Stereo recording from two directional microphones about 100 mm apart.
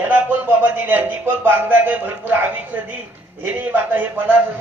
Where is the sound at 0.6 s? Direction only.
15° right (ahead or behind).